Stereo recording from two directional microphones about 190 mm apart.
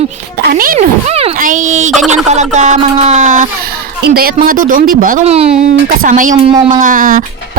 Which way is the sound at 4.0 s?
50° right (ahead or behind).